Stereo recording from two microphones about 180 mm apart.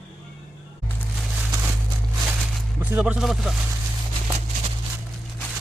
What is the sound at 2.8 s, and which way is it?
Speech, 10° right (ahead or behind).